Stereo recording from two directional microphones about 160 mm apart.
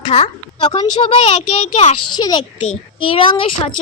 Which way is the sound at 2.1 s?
30° left (ahead or behind).